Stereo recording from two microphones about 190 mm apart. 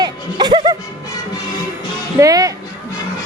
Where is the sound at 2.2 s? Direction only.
20° right (ahead or behind).